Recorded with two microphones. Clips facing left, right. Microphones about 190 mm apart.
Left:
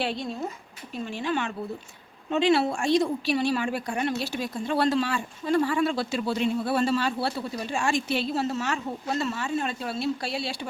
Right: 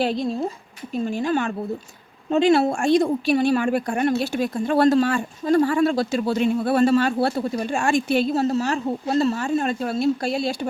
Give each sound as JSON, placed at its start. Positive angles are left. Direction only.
{"t": 0.0, "sound": "a woman's voice", "side_deg": -40}